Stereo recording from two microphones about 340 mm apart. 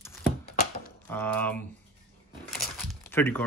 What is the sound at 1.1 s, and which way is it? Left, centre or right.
Speech, centre.